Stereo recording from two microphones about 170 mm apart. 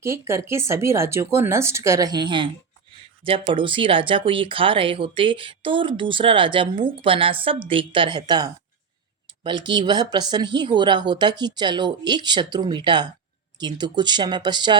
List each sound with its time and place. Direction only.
0.0 s speech: 15° right (ahead or behind)